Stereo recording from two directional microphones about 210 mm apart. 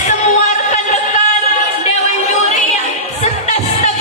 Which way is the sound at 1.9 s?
35° left (ahead or behind).